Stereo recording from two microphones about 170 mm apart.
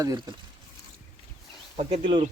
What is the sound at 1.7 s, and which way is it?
Speech, 35° right (ahead or behind).